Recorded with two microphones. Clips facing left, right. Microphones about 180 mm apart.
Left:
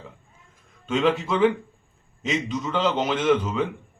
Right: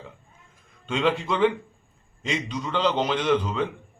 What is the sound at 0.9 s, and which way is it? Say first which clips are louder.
A man's voice: left 2 dB; 5° left (ahead or behind).